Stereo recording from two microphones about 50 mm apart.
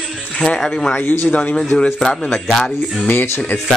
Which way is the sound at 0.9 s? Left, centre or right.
Left.